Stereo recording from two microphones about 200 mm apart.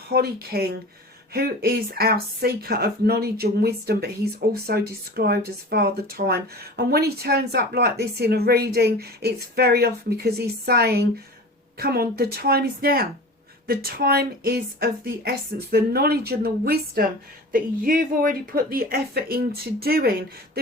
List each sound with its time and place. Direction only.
0.1 s speech: 50° right (ahead or behind)